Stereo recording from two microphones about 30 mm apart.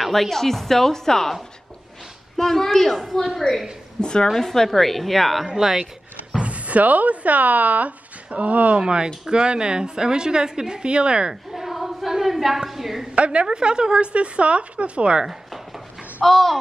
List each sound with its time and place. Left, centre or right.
0.0 s a woman's voice: centre
2.3 s a woman's voice: centre
4.0 s a woman's voice: left
4.4 s a woman's voice: centre
5.5 s a woman's voice: centre
6.4 s a sound: right
6.8 s speech: right
8.7 s a woman's voice: right
11.5 s a woman's voice: centre
13.1 s a woman's voice: right
16.3 s a woman's voice: centre